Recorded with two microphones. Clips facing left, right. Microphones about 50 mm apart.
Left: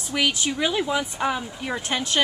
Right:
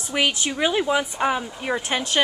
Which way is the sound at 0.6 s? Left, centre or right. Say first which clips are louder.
Right 4 dB; centre.